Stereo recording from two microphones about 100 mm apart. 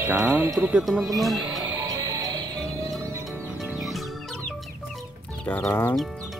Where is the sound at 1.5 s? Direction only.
40° right (ahead or behind).